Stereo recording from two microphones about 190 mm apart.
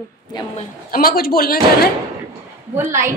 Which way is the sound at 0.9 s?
50° left (ahead or behind).